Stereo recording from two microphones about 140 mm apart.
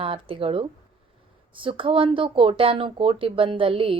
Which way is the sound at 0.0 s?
40° right (ahead or behind).